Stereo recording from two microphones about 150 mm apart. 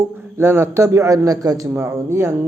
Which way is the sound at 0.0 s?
15° right (ahead or behind).